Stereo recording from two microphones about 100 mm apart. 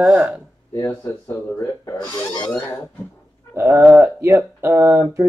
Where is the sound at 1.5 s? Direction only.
35° left (ahead or behind).